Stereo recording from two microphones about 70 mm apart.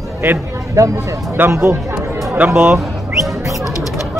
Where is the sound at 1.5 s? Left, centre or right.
Right.